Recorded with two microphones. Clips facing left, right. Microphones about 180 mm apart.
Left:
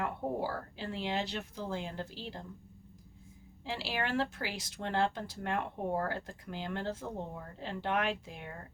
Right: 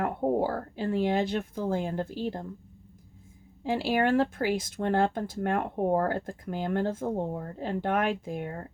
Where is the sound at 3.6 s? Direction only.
50° right (ahead or behind).